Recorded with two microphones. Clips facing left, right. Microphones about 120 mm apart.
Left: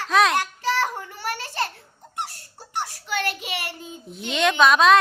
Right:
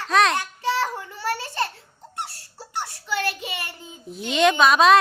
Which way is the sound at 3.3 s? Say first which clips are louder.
Left 2 dB; 65° left (ahead or behind).